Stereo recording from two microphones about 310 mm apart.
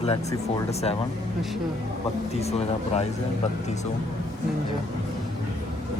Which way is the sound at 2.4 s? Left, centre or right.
Centre.